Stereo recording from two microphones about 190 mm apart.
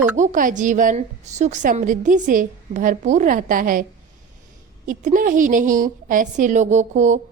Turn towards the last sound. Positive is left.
turn(degrees=-40)  # may be behind; listen again after turning